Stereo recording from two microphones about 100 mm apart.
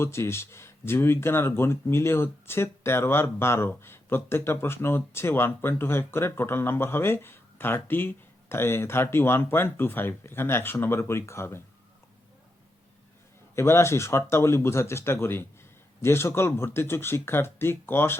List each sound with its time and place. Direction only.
0.0 s speech: 25° left (ahead or behind)
13.6 s speech: 25° left (ahead or behind)